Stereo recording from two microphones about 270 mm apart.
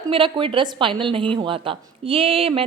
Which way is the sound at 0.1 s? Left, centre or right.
Centre.